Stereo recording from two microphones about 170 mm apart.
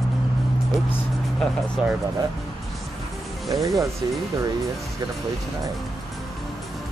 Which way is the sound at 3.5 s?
20° right (ahead or behind).